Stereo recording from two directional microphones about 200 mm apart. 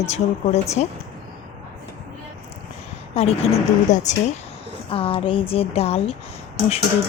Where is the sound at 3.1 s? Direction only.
30° left (ahead or behind).